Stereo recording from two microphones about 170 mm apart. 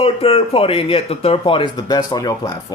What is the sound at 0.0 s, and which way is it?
A man's voice, 35° left (ahead or behind).